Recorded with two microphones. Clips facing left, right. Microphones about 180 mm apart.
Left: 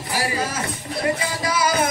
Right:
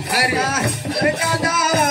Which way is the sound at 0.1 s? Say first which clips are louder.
Right 4 dB; 70° right (ahead or behind).